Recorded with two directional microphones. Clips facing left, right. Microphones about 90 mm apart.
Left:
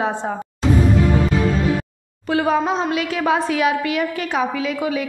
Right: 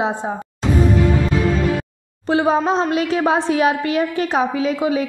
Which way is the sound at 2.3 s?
30° right (ahead or behind).